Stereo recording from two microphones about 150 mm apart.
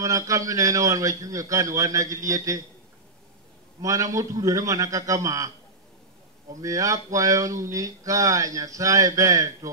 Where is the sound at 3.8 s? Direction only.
20° right (ahead or behind).